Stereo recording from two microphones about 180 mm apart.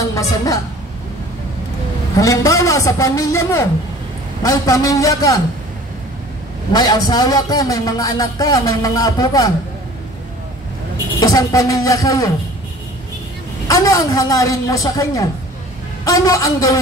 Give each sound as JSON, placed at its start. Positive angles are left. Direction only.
{"t": 2.1, "sound": "a man's voice", "side_deg": 20}
{"t": 6.7, "sound": "a man's voice", "side_deg": 20}
{"t": 11.2, "sound": "a man's voice", "side_deg": 20}
{"t": 13.7, "sound": "a man's voice", "side_deg": 20}